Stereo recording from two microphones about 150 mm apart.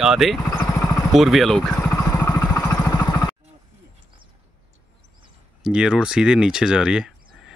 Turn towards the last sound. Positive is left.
turn(degrees=-5)  # may be behind; listen again after turning